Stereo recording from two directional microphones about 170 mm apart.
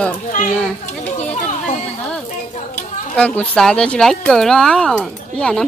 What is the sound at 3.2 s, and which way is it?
Speech, 5° left (ahead or behind).